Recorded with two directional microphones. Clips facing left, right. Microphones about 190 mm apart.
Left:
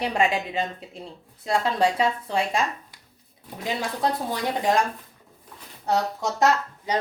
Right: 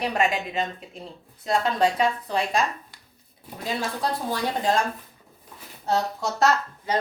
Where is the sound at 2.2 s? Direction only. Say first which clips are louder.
Even; 25° left (ahead or behind).